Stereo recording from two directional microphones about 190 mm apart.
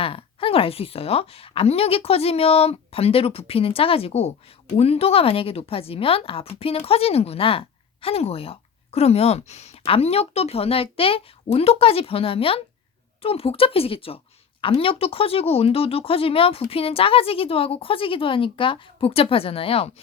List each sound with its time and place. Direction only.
0.0 s speech: 30° left (ahead or behind)